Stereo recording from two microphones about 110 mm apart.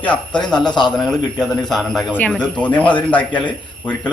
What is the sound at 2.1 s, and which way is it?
A man's voice, 10° left (ahead or behind).